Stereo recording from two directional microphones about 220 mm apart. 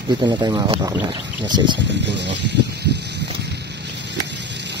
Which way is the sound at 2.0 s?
55° right (ahead or behind).